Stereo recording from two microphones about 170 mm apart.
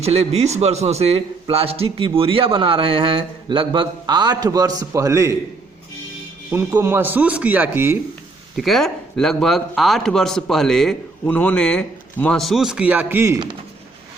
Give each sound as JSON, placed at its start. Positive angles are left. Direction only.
{"t": 0.0, "sound": "a man's voice", "side_deg": -35}
{"t": 6.5, "sound": "a man's voice", "side_deg": -15}
{"t": 8.5, "sound": "a man's voice", "side_deg": 0}